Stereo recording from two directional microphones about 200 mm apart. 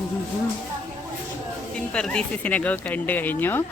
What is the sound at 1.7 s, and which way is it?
Speech, 5° left (ahead or behind).